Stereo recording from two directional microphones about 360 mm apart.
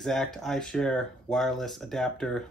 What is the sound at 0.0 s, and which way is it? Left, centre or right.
Speech, centre.